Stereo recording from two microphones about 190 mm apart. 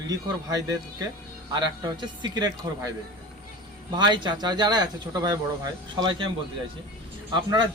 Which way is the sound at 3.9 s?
25° right (ahead or behind).